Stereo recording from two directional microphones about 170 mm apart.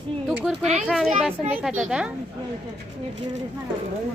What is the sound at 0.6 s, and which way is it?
Speech, 40° right (ahead or behind).